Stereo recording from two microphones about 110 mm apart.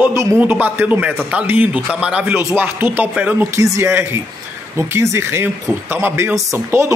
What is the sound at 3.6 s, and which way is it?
Speech, 25° right (ahead or behind).